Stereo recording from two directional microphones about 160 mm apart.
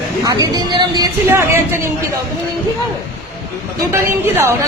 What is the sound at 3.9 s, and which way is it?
Speech, 15° right (ahead or behind).